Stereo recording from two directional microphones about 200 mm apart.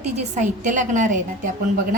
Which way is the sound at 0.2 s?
40° right (ahead or behind).